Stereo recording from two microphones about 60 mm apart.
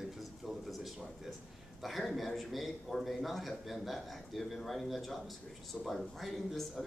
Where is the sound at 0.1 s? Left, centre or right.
Centre.